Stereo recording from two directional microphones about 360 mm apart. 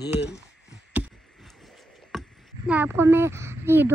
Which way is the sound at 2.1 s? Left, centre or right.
Centre.